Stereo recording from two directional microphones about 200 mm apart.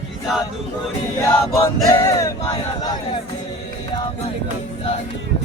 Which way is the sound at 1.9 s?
15° left (ahead or behind).